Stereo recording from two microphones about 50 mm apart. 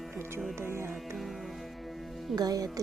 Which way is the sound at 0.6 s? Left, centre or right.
Right.